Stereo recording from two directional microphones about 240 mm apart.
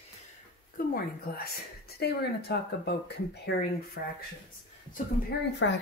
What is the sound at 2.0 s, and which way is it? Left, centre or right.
Speech, left.